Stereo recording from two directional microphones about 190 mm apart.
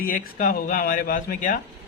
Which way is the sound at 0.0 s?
50° left (ahead or behind).